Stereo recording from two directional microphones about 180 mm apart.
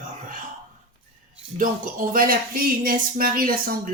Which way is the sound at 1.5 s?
50° right (ahead or behind).